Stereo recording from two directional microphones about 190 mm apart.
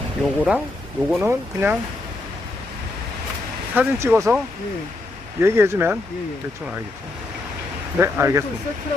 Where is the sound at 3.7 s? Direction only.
10° right (ahead or behind).